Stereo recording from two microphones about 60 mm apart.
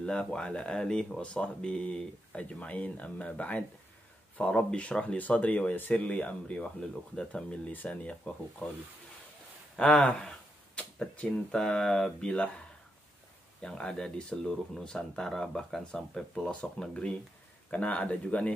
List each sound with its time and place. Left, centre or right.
0.0 s speech: centre
7.7 s speech: left
9.8 s speech: centre
13.6 s speech: centre